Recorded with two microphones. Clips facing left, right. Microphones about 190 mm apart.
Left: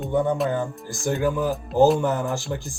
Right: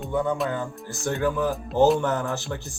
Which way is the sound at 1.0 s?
10° left (ahead or behind).